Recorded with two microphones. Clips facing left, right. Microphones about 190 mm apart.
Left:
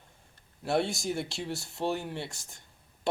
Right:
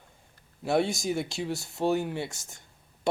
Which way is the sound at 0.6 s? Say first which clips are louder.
Right 3 dB; centre (ahead or behind).